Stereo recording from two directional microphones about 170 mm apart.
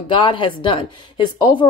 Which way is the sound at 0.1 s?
30° left (ahead or behind).